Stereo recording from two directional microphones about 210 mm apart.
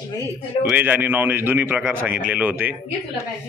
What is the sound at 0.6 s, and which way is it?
A man's voice, 10° right (ahead or behind).